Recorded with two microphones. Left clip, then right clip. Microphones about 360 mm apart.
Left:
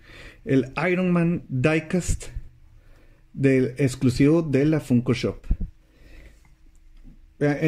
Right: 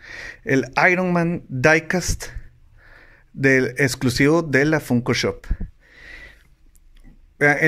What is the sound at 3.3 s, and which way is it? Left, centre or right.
A man's voice, centre.